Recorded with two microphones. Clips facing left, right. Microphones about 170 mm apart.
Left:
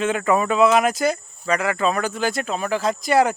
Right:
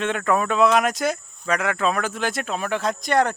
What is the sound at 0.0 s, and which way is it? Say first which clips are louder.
Speech: left 2 dB; centre (ahead or behind).